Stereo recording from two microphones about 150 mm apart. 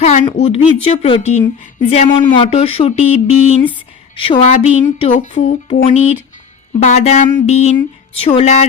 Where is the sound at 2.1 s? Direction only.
35° left (ahead or behind).